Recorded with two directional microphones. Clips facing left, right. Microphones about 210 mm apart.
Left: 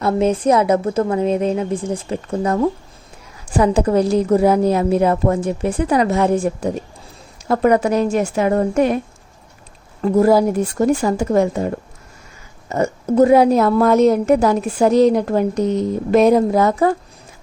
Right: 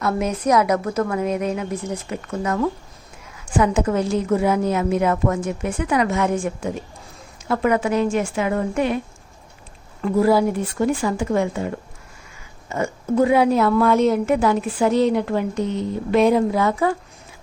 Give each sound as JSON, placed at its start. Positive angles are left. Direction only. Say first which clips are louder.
{"t": 0.0, "sound": "a woman's voice", "louder": "left 5 dB", "side_deg": 30}
{"t": 10.0, "sound": "a woman's voice", "louder": "left 4 dB", "side_deg": 45}